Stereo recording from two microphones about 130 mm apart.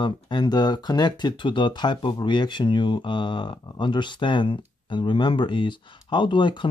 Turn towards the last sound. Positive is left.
turn(degrees=35)  # may be behind; listen again after turning